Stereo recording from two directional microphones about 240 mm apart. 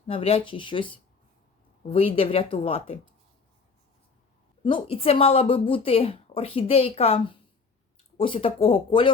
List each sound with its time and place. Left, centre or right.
0.1 s a woman's voice: left
4.6 s a woman's voice: left